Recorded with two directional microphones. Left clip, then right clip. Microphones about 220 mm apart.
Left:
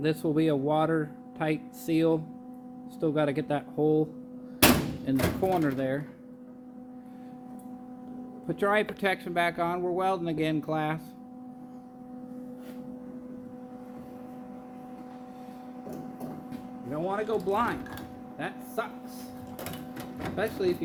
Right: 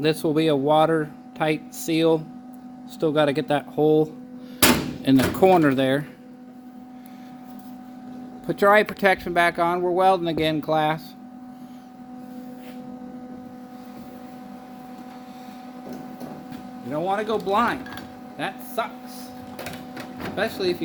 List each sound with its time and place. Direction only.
0.0 s speech: 25° right (ahead or behind)
5.0 s speech: 55° right (ahead or behind)
8.4 s speech: 25° right (ahead or behind)
16.9 s speech: 40° right (ahead or behind)
18.8 s speech: 30° right (ahead or behind)
20.3 s speech: 35° right (ahead or behind)